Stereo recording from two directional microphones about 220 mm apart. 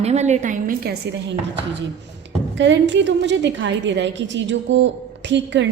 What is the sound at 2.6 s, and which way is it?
A woman's voice, 55° right (ahead or behind).